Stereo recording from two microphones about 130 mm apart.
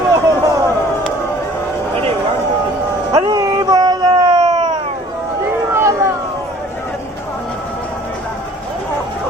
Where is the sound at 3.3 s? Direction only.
30° right (ahead or behind).